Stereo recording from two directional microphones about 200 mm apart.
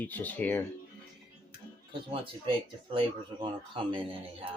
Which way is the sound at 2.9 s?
25° right (ahead or behind).